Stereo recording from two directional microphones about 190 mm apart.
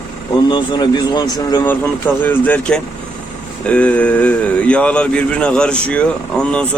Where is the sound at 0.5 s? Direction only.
25° left (ahead or behind).